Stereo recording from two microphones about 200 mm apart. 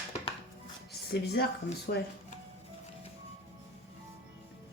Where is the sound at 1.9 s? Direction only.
45° left (ahead or behind).